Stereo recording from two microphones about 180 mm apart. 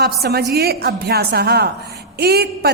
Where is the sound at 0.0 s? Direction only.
60° right (ahead or behind).